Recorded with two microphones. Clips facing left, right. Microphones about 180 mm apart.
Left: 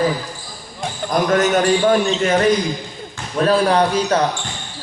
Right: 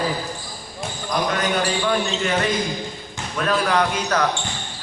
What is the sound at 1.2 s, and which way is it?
A man's voice, 45° left (ahead or behind).